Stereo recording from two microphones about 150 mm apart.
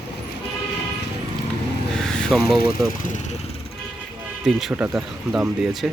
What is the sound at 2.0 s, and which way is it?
Vehicle, 5° left (ahead or behind).